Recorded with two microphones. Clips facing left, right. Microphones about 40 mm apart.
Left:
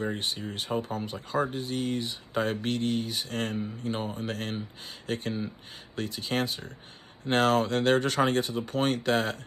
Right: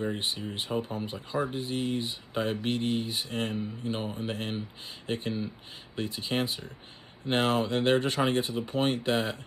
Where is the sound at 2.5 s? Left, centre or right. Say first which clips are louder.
Even; right.